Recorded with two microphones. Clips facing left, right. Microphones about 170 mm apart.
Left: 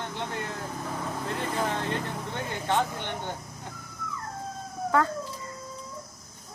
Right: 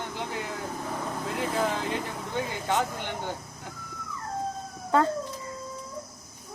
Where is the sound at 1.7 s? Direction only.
10° right (ahead or behind).